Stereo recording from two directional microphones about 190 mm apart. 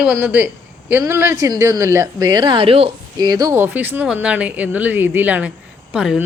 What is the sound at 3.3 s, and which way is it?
A woman's voice, 20° right (ahead or behind).